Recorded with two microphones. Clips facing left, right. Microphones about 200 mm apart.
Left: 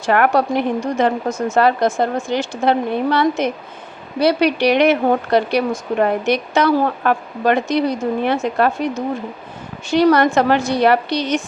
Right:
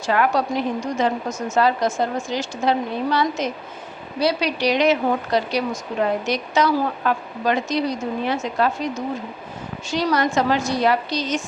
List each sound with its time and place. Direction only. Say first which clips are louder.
0.0 s speech: left 4 dB; 60° left (ahead or behind)
9.9 s speech: left 7 dB; 60° left (ahead or behind)